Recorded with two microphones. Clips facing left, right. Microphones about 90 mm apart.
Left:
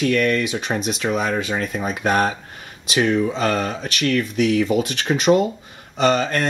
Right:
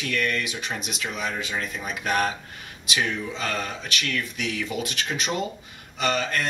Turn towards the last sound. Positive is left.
turn(degrees=35)  # may be behind; listen again after turning